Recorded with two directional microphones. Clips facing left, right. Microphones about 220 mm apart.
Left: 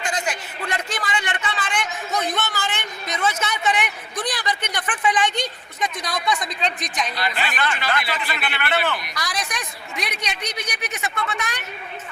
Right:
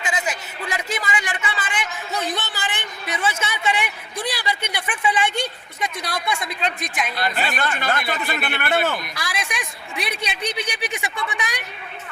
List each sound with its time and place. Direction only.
0.0 s a sound: 5° right (ahead or behind)
3.6 s speech: 10° right (ahead or behind)
7.2 s speech: 45° right (ahead or behind)
9.1 s speech: 5° right (ahead or behind)